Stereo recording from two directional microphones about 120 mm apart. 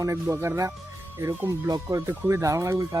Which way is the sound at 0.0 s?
25° right (ahead or behind).